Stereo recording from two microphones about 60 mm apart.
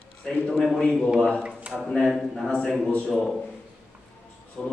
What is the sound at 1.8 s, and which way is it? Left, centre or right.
A man's voice, centre.